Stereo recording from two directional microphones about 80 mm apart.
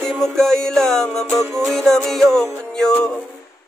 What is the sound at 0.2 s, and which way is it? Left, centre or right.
Music, centre.